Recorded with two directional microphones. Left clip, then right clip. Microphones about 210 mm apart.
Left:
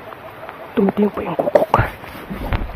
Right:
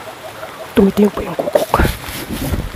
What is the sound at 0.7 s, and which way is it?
Speech, 15° right (ahead or behind).